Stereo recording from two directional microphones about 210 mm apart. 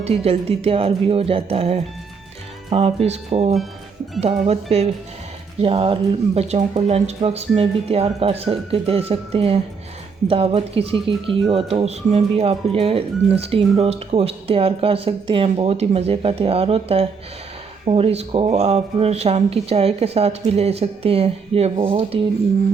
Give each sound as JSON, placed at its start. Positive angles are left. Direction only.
{"t": 0.0, "sound": "speech", "side_deg": -30}